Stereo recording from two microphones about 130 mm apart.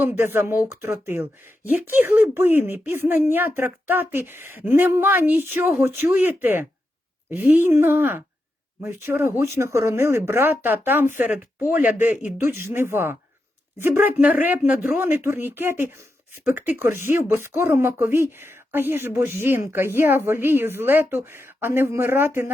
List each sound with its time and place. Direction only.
0.0 s speech: 15° right (ahead or behind)